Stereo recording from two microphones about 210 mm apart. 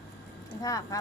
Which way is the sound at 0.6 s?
15° left (ahead or behind).